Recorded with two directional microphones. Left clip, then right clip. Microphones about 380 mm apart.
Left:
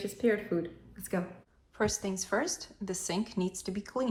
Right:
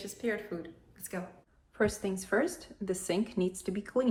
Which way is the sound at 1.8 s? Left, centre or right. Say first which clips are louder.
Right 1 dB; centre.